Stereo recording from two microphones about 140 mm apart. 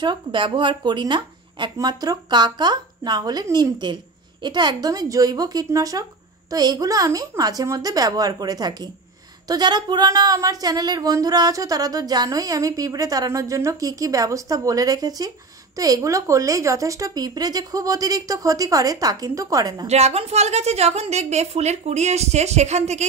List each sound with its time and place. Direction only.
0.0 s speech: 35° right (ahead or behind)
19.9 s a woman's voice: 50° right (ahead or behind)